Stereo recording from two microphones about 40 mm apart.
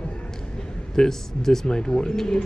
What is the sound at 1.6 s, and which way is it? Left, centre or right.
Speech, left.